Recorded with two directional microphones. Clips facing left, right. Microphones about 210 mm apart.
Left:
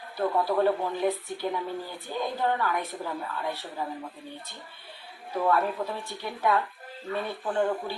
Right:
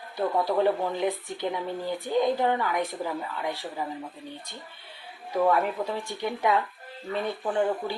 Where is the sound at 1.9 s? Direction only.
15° right (ahead or behind).